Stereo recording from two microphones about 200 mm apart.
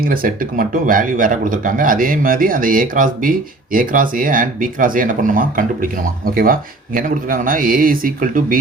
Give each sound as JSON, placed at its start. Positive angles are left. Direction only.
{"t": 0.0, "sound": "speech", "side_deg": -45}